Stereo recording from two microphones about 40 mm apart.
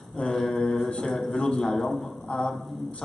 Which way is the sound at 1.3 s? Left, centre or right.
Left.